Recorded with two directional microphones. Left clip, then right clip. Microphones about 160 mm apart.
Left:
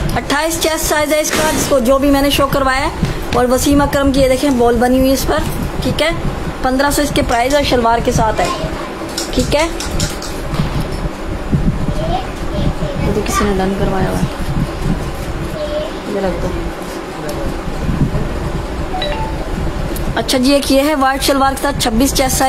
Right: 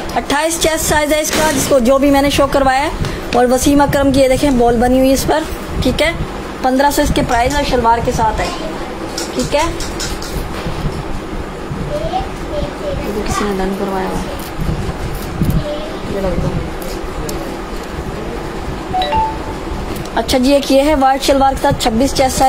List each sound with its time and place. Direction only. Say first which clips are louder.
0.1 s speech: right 1 dB; 10° right (ahead or behind)
6.6 s speech: right 2 dB; 15° right (ahead or behind)
7.3 s a woman's voice: left 2 dB; 25° left (ahead or behind)
20.2 s a woman's voice: right 1 dB; centre (ahead or behind)
21.9 s a woman's voice: right 1 dB; 25° left (ahead or behind)